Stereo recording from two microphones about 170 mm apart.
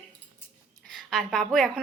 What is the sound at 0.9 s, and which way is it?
Speech, centre (ahead or behind).